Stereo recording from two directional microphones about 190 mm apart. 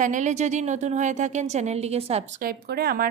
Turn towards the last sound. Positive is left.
turn(degrees=-55)  # may be behind; listen again after turning